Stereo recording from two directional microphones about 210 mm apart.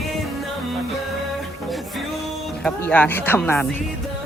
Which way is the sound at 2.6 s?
5° left (ahead or behind).